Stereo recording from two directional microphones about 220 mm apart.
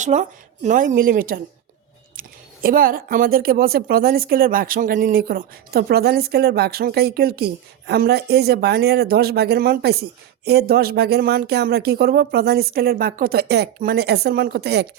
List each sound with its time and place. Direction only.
0.0 s speech: 35° right (ahead or behind); by 14.8 s 50° right (ahead or behind)